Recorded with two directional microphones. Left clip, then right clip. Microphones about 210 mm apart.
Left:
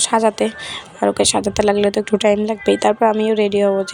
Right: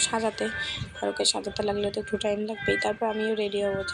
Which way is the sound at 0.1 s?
40° left (ahead or behind).